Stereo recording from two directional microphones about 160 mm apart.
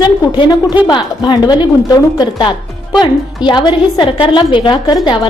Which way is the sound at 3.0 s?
30° left (ahead or behind).